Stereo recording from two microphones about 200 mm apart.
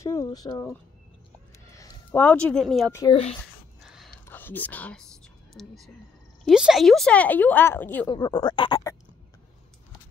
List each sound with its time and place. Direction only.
0.0 s speech: 15° left (ahead or behind); by 2.9 s centre (ahead or behind)
2.9 s speech: 15° left (ahead or behind)
3.8 s a sound: centre (ahead or behind)
4.3 s speech: 10° left (ahead or behind)
8.1 s speech: 20° left (ahead or behind)